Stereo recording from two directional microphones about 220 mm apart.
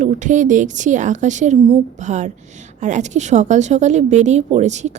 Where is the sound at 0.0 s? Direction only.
35° right (ahead or behind).